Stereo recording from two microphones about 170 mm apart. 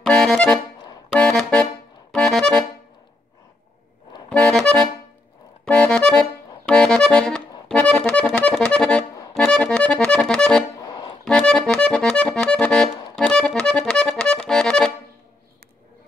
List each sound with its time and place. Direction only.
0.0 s accordion: centre (ahead or behind)
4.3 s accordion: 5° left (ahead or behind)
10.8 s accordion: 25° left (ahead or behind)
11.2 s music: 5° left (ahead or behind)